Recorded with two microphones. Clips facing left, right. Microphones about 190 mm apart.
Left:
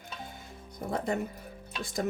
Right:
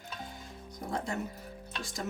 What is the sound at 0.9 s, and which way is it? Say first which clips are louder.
Music: left 4 dB; 60° left (ahead or behind).